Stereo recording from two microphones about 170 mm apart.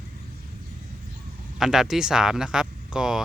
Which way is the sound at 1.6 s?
Centre (ahead or behind).